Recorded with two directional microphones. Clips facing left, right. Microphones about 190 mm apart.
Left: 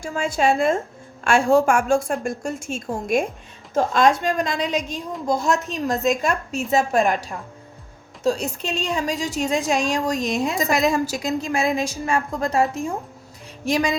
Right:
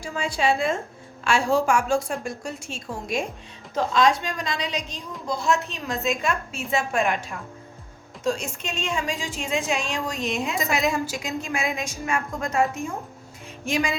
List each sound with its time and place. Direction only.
0.0 s a woman's voice: 50° left (ahead or behind)